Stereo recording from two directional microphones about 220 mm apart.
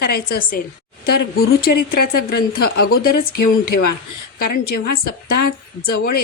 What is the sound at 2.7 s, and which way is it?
A woman's voice, 45° left (ahead or behind).